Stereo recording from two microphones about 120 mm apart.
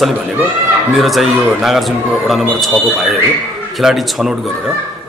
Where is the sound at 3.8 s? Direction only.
Centre (ahead or behind).